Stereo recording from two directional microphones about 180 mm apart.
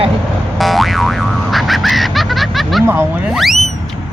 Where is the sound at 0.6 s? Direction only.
Centre (ahead or behind).